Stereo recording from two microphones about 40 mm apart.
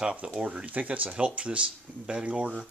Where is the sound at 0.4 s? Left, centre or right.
Right.